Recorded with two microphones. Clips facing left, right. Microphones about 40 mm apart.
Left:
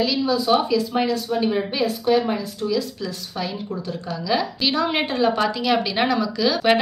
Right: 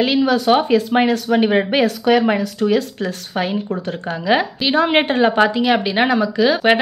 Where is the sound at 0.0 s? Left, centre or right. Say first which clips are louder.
Right 5 dB; right.